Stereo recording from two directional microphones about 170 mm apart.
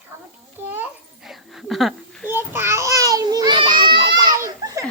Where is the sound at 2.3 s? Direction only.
15° right (ahead or behind).